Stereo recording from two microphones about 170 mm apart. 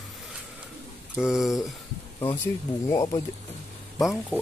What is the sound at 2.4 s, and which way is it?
Speech, 20° left (ahead or behind).